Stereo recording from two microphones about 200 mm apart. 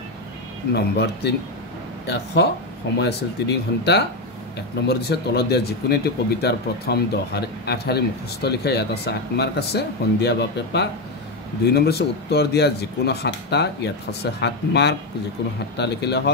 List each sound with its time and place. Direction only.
0.7 s speech: 55° left (ahead or behind)